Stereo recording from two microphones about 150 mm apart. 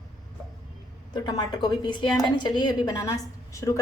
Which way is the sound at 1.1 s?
30° left (ahead or behind).